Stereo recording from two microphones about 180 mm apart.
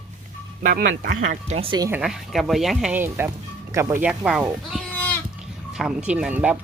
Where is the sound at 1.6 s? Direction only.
25° right (ahead or behind).